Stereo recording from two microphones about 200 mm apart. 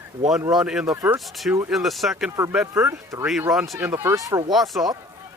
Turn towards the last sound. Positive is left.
turn(degrees=0)  # may be behind; listen again after turning